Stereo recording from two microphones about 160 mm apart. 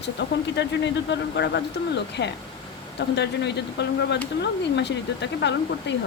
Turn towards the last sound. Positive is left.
turn(degrees=90)